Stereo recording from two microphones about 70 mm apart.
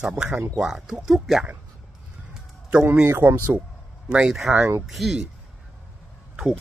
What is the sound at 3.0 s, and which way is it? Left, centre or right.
Speech, right.